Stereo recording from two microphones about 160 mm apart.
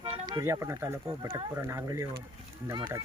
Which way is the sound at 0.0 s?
25° right (ahead or behind).